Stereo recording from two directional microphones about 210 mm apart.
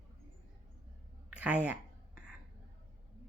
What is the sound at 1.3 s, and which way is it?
Speech, 5° right (ahead or behind).